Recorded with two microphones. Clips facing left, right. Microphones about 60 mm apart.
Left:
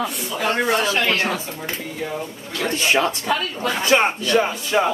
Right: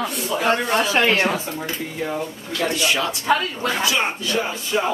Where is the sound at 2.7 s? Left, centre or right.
Left.